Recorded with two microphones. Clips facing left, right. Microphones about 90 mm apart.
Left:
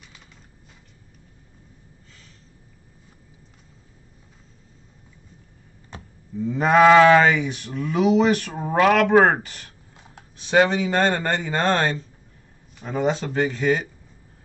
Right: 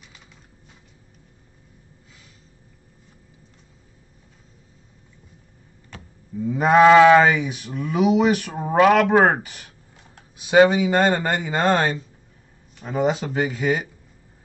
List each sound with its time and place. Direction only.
6.4 s speech: 5° right (ahead or behind)